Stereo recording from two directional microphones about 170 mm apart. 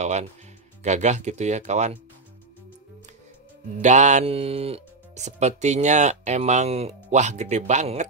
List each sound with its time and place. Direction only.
0.0 s speech: 40° right (ahead or behind)
3.8 s speech: 45° right (ahead or behind)